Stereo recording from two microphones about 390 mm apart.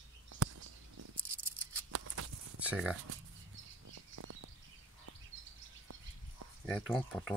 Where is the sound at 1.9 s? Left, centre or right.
Right.